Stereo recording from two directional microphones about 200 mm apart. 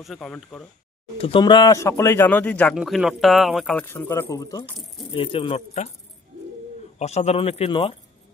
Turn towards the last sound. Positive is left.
turn(degrees=30)  # may be behind; listen again after turning